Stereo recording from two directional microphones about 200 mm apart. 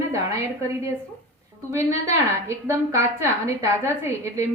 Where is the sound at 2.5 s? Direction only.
15° right (ahead or behind).